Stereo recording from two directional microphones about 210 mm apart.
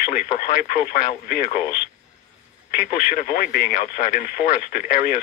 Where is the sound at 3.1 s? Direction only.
40° left (ahead or behind).